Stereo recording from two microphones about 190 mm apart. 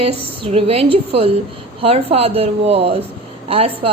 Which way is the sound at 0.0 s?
30° right (ahead or behind).